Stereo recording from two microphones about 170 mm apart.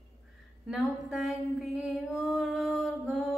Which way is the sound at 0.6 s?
5° right (ahead or behind).